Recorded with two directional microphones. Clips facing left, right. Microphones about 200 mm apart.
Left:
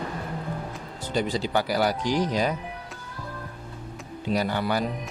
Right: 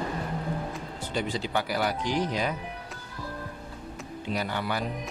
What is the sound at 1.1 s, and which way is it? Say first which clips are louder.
Speech: left 4 dB; 35° left (ahead or behind).